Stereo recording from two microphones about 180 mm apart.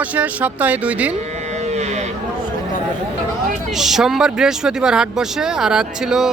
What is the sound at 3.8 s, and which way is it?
Speech, centre (ahead or behind).